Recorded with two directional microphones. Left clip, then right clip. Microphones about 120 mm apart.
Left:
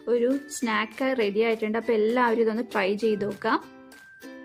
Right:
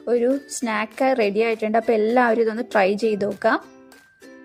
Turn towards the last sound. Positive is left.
turn(degrees=-35)  # may be behind; listen again after turning